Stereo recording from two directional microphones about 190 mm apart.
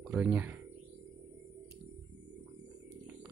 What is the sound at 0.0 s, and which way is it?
Speech, 5° right (ahead or behind).